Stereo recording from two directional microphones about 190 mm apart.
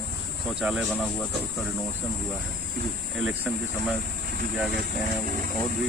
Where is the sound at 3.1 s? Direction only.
Centre (ahead or behind).